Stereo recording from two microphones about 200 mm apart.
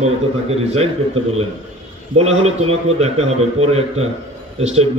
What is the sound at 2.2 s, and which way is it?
A man's voice, 30° right (ahead or behind).